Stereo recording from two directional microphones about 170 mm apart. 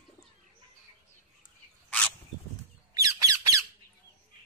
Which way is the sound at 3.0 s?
20° right (ahead or behind).